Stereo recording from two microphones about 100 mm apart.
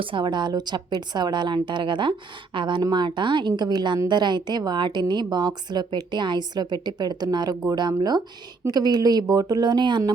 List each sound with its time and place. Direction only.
0.0 s a woman's voice: 55° right (ahead or behind)